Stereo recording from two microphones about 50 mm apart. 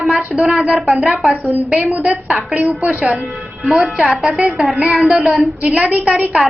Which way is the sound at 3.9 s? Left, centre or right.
Right.